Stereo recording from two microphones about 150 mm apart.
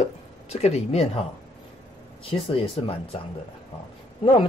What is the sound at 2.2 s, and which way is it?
Speech, 40° left (ahead or behind).